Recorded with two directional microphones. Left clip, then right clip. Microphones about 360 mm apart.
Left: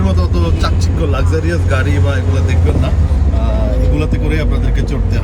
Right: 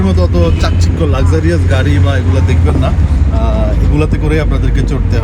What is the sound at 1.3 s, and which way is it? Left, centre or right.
Speech, right.